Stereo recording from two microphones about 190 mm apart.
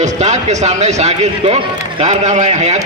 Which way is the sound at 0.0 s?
35° right (ahead or behind).